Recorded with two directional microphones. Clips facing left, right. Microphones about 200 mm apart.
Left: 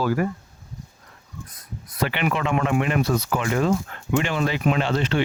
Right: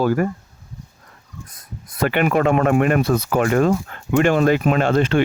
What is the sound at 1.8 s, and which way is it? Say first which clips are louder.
Speech: right 5 dB; 50° right (ahead or behind).